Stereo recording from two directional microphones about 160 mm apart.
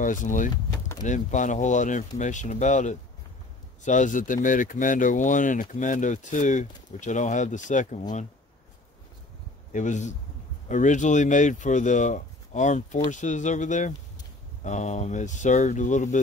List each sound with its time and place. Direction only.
0.0 s speech: 55° left (ahead or behind)
0.7 s a sound: 15° left (ahead or behind)
1.0 s speech: 50° left (ahead or behind)
9.7 s speech: 50° left (ahead or behind)